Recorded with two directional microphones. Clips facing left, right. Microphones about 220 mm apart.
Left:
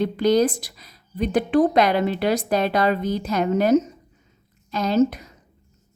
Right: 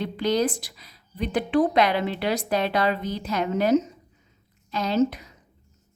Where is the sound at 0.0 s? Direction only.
45° left (ahead or behind).